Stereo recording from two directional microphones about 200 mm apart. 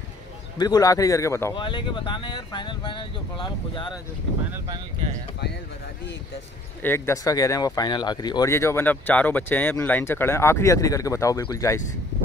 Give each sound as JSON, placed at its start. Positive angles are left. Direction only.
{"t": 0.6, "sound": "speech", "side_deg": 20}
{"t": 6.8, "sound": "speech", "side_deg": 10}